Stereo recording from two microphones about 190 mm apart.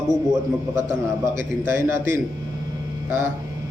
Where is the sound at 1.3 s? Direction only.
15° right (ahead or behind).